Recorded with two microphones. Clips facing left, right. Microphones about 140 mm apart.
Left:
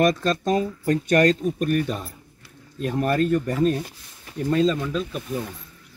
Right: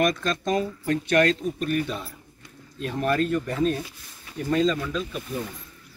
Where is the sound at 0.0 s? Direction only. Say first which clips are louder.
Left 4 dB; 35° left (ahead or behind).